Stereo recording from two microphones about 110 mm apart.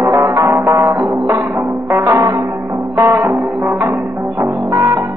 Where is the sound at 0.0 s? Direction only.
30° right (ahead or behind).